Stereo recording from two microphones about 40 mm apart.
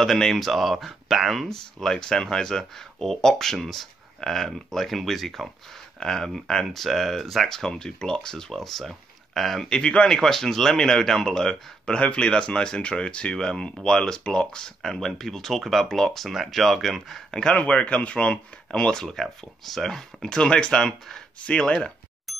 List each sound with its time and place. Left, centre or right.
0.0 s speech: centre
5.9 s speech: centre
9.7 s speech: left
10.1 s speech: centre
17.5 s speech: left
22.3 s bicycle bell: centre